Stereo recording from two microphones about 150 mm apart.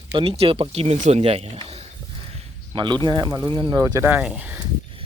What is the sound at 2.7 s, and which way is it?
Speech, 30° right (ahead or behind).